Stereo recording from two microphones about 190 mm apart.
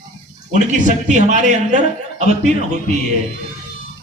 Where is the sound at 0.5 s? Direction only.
40° right (ahead or behind).